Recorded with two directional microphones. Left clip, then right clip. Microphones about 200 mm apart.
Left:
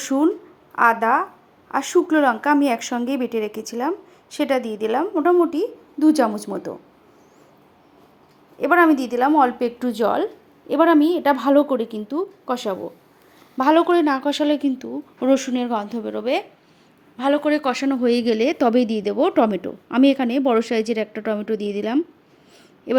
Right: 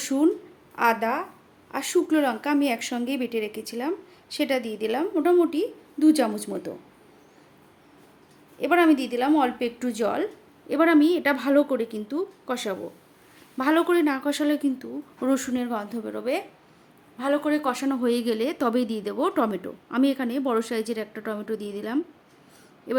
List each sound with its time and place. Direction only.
0.1 s a woman's voice: 10° left (ahead or behind)
4.9 s a woman's voice: 5° left (ahead or behind)
8.5 s a woman's voice: 15° left (ahead or behind)